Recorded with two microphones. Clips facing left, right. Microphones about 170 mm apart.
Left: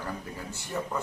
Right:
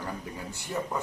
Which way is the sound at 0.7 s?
10° right (ahead or behind).